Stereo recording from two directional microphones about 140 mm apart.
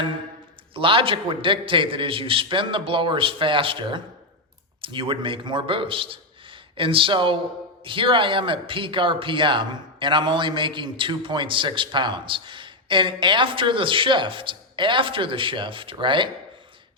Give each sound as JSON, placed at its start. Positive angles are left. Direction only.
{"t": 0.7, "sound": "a man's voice", "side_deg": -40}